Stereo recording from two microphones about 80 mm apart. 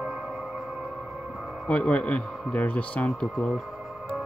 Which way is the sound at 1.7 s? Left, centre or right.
Centre.